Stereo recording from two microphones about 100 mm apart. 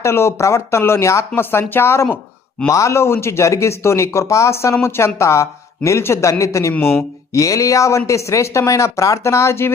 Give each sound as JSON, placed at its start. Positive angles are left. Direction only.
{"t": 0.0, "sound": "speech", "side_deg": 25}
{"t": 6.7, "sound": "speech", "side_deg": 20}
{"t": 7.3, "sound": "speech", "side_deg": 35}